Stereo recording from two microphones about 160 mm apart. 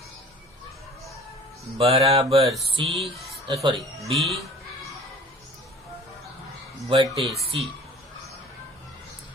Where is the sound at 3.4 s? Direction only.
35° right (ahead or behind).